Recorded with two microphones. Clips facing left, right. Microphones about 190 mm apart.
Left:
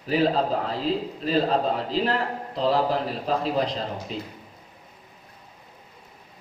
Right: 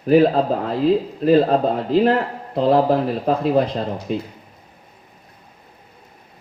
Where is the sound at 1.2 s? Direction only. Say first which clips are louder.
Right 13 dB; 55° right (ahead or behind).